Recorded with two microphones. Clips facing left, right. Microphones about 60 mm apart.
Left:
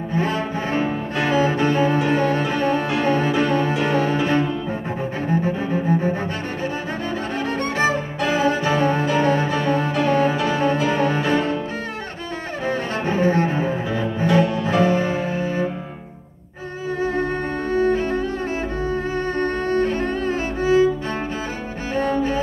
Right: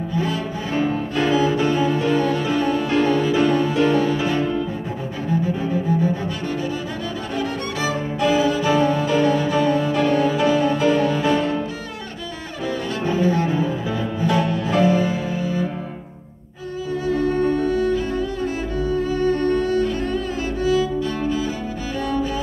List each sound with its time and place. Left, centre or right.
0.1 s cello: left
1.2 s music: left
5.3 s cello: left
7.3 s music: left
12.6 s cello: left
14.8 s music: left
17.0 s cello: left